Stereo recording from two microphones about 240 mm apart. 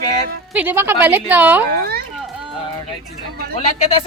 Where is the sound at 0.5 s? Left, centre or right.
Centre.